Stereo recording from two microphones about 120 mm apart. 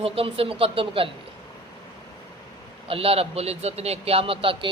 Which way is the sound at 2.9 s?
55° right (ahead or behind).